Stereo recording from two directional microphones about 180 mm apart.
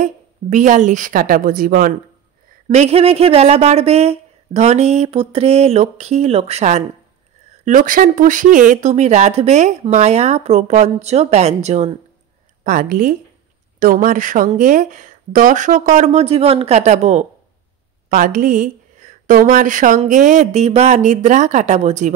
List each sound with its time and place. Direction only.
0.0 s a woman's voice: 45° right (ahead or behind)
2.7 s speech: 35° right (ahead or behind)
7.6 s speech: 50° right (ahead or behind)
12.6 s a woman's voice: 50° right (ahead or behind)